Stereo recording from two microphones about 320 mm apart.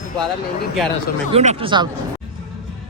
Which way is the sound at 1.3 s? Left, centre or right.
Centre.